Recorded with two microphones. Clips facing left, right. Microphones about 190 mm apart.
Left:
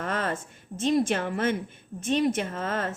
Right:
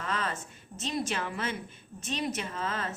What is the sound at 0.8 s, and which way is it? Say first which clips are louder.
A woman's voice: left 9 dB; 50° left (ahead or behind).